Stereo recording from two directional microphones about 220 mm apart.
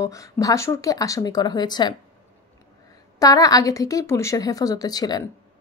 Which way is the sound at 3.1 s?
15° left (ahead or behind).